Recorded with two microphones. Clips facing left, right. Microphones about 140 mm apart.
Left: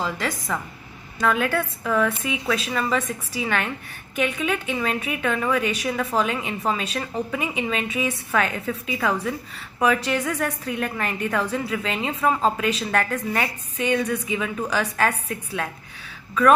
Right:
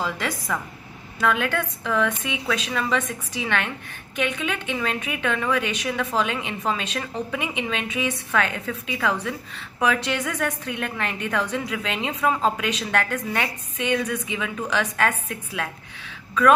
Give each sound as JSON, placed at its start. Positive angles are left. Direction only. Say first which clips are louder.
{"t": 0.0, "sound": "a woman's voice", "louder": "left 1 dB", "side_deg": 0}